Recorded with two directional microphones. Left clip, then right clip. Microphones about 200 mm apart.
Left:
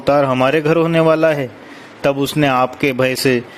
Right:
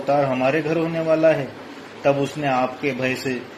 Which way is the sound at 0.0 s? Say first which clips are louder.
Left 6 dB; 60° left (ahead or behind).